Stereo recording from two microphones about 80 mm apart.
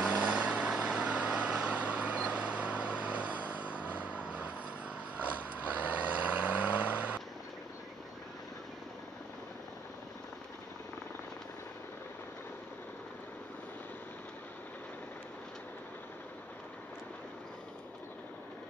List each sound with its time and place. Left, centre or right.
0.0 s vehicle: centre